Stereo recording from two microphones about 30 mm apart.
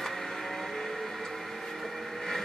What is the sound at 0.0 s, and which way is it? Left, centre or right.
Vehicle, centre.